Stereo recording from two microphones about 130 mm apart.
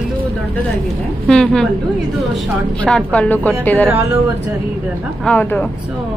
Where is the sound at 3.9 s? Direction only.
15° right (ahead or behind).